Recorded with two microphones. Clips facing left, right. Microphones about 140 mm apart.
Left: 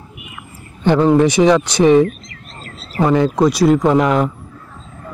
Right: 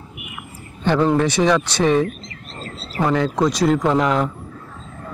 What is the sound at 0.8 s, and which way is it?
Speech, 15° left (ahead or behind).